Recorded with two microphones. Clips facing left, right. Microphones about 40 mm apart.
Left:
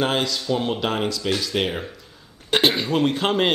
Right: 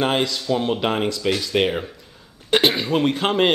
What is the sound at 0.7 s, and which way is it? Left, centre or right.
Speech, centre.